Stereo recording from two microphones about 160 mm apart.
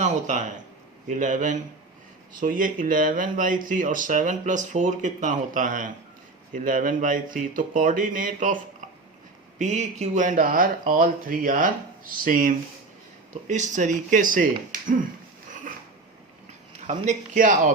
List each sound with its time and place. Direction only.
0.0 s speech: 50° right (ahead or behind)
9.6 s speech: 50° right (ahead or behind)
16.8 s speech: 50° right (ahead or behind)